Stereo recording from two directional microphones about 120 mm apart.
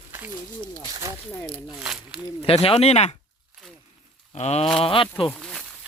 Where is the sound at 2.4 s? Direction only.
50° left (ahead or behind).